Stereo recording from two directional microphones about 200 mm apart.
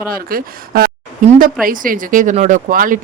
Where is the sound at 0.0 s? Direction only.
45° right (ahead or behind).